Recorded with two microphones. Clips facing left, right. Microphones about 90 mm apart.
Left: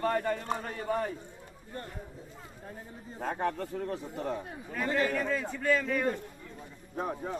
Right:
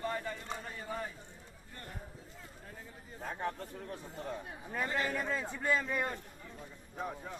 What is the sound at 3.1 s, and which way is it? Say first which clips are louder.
A man's voice: left 7 dB; 90° left.